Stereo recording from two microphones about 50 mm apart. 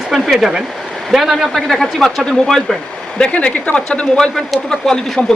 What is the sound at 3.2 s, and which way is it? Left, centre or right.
Speech, left.